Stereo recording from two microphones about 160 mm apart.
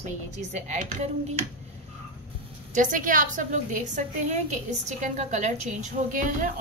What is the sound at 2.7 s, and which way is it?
A woman's voice, 55° right (ahead or behind).